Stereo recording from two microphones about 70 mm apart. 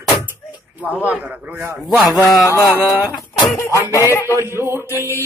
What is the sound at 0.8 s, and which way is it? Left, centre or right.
Speech, right.